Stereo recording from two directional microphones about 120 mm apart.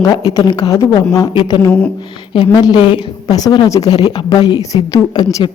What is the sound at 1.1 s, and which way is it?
Speech, 35° left (ahead or behind).